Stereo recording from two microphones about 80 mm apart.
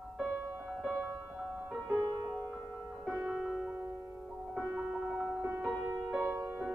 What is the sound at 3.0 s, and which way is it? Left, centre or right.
Music, centre.